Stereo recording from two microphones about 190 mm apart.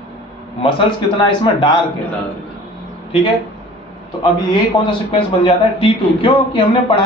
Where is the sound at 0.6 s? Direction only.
25° left (ahead or behind).